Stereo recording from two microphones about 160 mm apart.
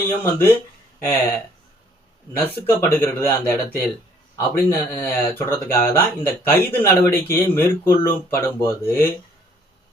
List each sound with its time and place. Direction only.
0.0 s speech: 15° left (ahead or behind)
2.4 s speech: 15° left (ahead or behind)